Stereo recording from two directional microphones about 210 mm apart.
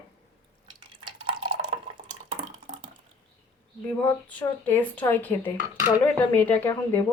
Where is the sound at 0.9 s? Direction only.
25° right (ahead or behind).